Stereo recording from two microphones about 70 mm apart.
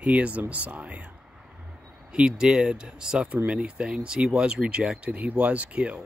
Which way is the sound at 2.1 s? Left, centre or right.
Centre.